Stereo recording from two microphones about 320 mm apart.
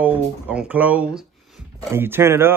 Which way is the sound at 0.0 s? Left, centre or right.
Centre.